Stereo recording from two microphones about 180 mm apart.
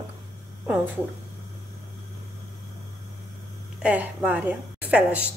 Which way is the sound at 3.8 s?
10° right (ahead or behind).